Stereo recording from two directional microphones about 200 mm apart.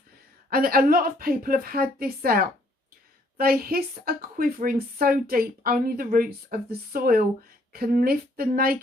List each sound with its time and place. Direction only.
0.5 s speech: 45° right (ahead or behind)